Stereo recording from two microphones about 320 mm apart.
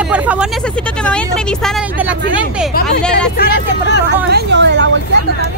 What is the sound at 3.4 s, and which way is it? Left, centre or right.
Speech, left.